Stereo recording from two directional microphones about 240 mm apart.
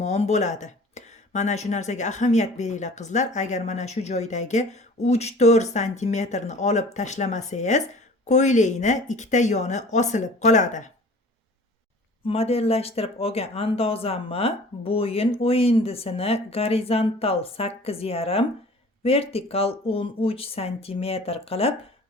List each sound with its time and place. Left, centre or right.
0.0 s speech: left
12.2 s speech: left